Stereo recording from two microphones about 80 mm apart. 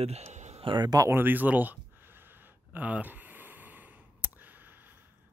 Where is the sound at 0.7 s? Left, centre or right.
Right.